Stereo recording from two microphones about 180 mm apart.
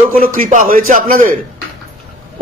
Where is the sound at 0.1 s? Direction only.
50° right (ahead or behind).